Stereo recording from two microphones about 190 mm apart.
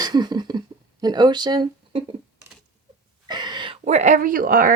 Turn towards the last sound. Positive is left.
turn(degrees=-50)  # may be behind; listen again after turning